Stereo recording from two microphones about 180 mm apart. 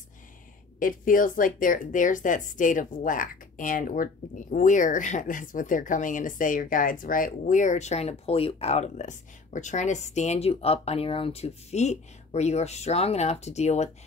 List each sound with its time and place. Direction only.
0.7 s speech: 50° left (ahead or behind)